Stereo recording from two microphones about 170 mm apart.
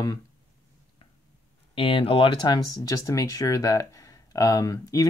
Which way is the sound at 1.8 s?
30° left (ahead or behind).